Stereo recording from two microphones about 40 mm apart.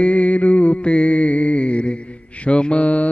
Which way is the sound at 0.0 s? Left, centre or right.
Left.